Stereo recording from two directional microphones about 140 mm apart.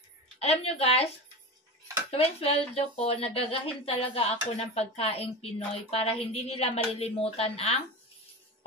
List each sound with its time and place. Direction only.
0.4 s speech: 45° left (ahead or behind)
2.0 s speech: 45° left (ahead or behind)